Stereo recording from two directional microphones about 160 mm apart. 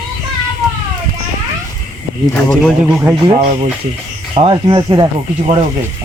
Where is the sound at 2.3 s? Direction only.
5° left (ahead or behind).